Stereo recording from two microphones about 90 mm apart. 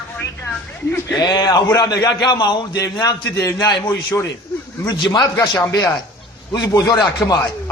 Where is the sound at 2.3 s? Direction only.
60° left (ahead or behind); by 3.8 s 45° left (ahead or behind).